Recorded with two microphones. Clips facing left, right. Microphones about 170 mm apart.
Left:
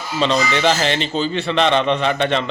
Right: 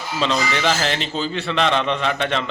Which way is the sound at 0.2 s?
Centre (ahead or behind).